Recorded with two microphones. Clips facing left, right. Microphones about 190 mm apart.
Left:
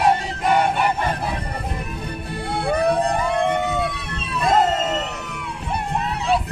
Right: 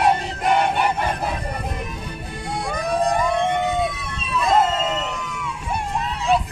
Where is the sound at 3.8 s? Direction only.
60° left (ahead or behind).